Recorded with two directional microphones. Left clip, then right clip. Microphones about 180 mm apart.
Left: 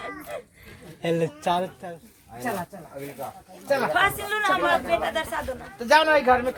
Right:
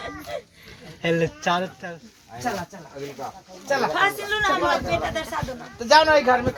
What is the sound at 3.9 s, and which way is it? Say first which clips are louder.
Speech: right 1 dB; 10° right (ahead or behind).